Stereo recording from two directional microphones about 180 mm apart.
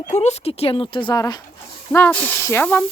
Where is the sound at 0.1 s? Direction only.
35° left (ahead or behind); by 1.4 s 20° left (ahead or behind).